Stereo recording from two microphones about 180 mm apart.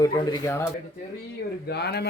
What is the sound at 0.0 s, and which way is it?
Speech, 20° left (ahead or behind).